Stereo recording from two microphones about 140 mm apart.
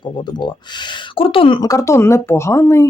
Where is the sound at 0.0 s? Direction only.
35° left (ahead or behind).